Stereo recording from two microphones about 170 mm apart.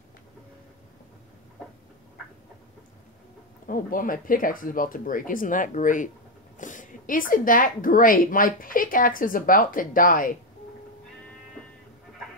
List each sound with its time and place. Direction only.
3.6 s speech: 55° left (ahead or behind)